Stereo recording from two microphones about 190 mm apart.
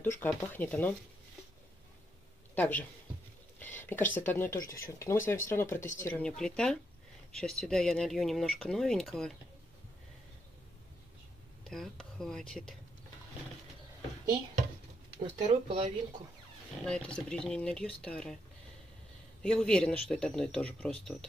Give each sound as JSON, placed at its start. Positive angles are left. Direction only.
{"t": 0.0, "sound": "speech", "side_deg": 10}
{"t": 2.5, "sound": "speech", "side_deg": 10}
{"t": 11.6, "sound": "speech", "side_deg": 0}
{"t": 15.1, "sound": "speech", "side_deg": -25}
{"t": 16.8, "sound": "speech", "side_deg": 5}
{"t": 19.4, "sound": "speech", "side_deg": 5}